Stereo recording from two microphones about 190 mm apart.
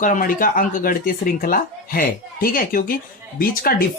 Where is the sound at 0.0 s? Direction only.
45° left (ahead or behind).